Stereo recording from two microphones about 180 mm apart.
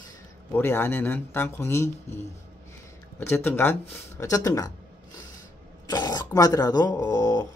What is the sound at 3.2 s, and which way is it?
Speech, 10° left (ahead or behind).